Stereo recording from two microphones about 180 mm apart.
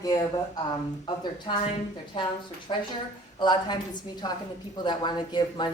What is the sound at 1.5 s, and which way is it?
Speech, 30° left (ahead or behind).